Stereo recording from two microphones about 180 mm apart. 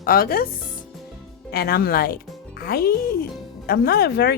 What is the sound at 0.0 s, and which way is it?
Speech, 55° left (ahead or behind).